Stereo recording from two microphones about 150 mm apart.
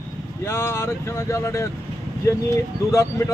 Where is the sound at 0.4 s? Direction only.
15° left (ahead or behind).